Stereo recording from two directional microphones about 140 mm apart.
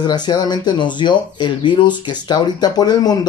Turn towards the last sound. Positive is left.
turn(degrees=30)  # may be behind; listen again after turning